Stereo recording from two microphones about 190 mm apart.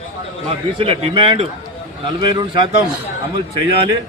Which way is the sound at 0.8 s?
30° right (ahead or behind).